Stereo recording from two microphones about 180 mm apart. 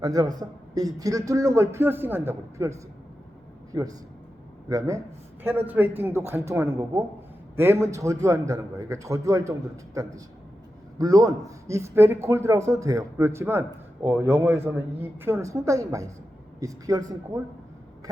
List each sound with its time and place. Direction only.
0.0 s a man's voice: 20° right (ahead or behind)